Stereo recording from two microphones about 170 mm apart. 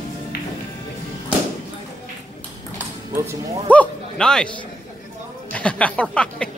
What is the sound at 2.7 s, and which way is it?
Music, 15° right (ahead or behind).